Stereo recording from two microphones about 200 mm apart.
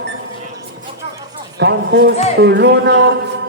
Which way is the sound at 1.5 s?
55° right (ahead or behind).